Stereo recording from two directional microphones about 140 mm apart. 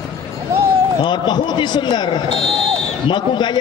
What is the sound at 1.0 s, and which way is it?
A man's voice, 30° left (ahead or behind).